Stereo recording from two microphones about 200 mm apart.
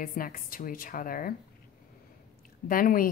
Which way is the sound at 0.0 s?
45° left (ahead or behind).